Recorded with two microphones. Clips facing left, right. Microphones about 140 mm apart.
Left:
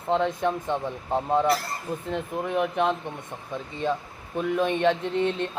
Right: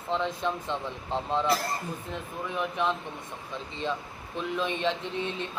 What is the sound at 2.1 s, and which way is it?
A man's voice, 60° left (ahead or behind).